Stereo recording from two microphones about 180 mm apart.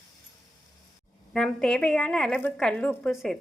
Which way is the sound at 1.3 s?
Centre (ahead or behind).